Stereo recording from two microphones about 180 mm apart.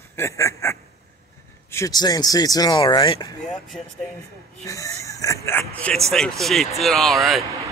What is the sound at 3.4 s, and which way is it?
Speech, 5° left (ahead or behind).